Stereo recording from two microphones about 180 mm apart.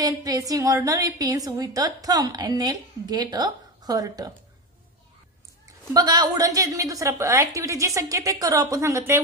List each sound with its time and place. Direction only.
0.0 s a woman's voice: 20° right (ahead or behind)
5.9 s a woman's voice: 20° right (ahead or behind)